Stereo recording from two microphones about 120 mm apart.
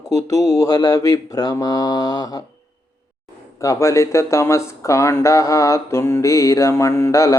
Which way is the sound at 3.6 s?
25° left (ahead or behind).